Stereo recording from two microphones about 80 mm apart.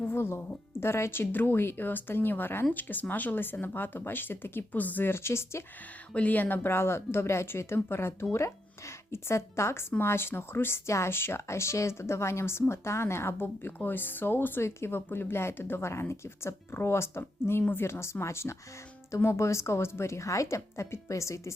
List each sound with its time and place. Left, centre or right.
0.0 s speech: left
6.1 s speech: left